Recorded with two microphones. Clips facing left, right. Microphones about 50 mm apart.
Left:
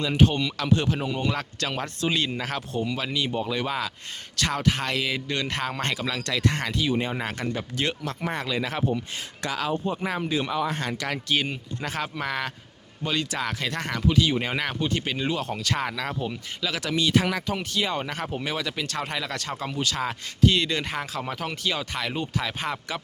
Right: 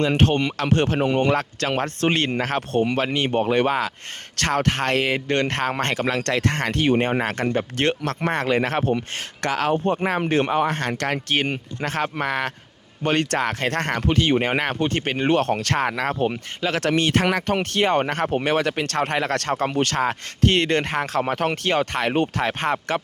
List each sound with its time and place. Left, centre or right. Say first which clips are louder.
0.0 s speech: right 3 dB; right
13.0 s speech: right 7 dB; right